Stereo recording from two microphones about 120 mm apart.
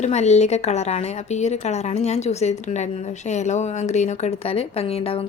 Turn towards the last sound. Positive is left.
turn(degrees=55)  # may be behind; listen again after turning